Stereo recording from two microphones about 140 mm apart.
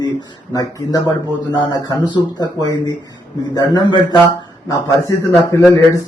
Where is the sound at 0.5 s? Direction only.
25° left (ahead or behind).